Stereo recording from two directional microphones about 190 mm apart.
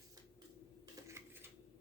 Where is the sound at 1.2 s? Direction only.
15° right (ahead or behind).